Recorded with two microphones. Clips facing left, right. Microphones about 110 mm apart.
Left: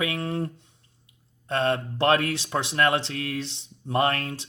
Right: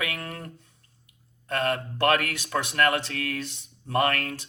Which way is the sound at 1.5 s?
25° left (ahead or behind).